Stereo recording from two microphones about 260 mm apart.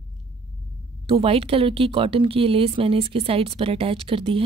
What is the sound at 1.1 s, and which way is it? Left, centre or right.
Speech, right.